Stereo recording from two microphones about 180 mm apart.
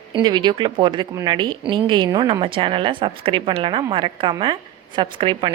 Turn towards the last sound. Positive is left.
turn(degrees=-25)  # may be behind; listen again after turning